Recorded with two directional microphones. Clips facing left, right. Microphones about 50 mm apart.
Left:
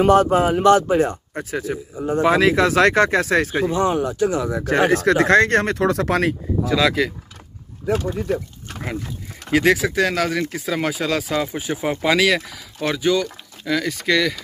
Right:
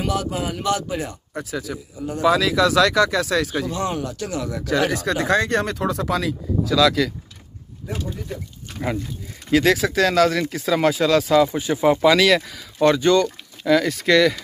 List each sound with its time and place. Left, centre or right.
0.0 s a man's voice: left
4.6 s speech: left
6.6 s speech: left
7.8 s speech: left
9.5 s speech: centre